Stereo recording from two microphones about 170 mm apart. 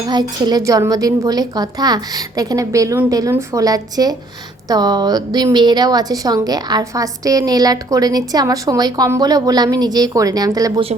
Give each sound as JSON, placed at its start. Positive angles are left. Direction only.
{"t": 0.1, "sound": "a woman's voice", "side_deg": -25}